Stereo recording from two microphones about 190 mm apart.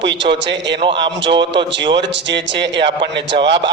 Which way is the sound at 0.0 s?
70° right (ahead or behind).